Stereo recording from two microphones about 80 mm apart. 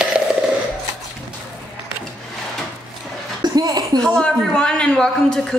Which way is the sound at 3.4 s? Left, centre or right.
Right.